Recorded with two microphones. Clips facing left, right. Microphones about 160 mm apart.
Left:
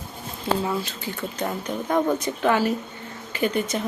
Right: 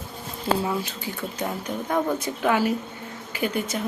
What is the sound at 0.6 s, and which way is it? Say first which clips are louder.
Speech: even; 10° right (ahead or behind).